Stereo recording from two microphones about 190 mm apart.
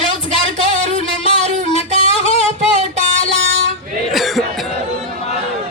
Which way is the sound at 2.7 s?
40° right (ahead or behind).